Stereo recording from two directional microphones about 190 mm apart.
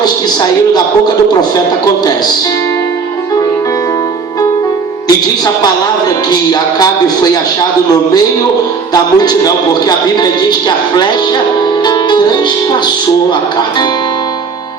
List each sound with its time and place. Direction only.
6.5 s a man's voice: 20° left (ahead or behind)
8.9 s a man's voice: 20° left (ahead or behind)